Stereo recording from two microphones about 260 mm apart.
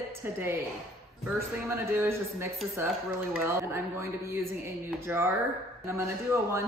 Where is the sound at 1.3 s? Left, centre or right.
Centre.